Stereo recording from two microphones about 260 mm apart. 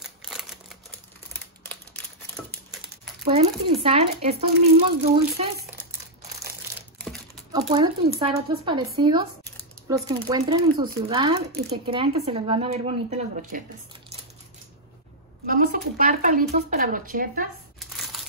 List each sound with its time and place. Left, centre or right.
0.3 s a sound: centre
3.3 s speech: right
7.5 s speech: centre
15.4 s speech: right
17.7 s crushing: centre